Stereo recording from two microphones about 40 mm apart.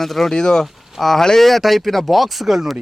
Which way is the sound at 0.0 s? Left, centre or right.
Centre.